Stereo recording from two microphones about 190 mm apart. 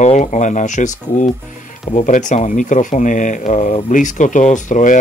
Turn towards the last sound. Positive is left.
turn(degrees=40)  # may be behind; listen again after turning